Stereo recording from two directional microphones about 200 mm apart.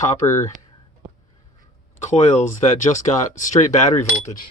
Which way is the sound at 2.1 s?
35° left (ahead or behind).